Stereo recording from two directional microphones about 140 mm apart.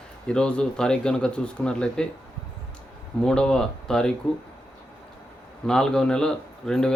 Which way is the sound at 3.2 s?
5° left (ahead or behind).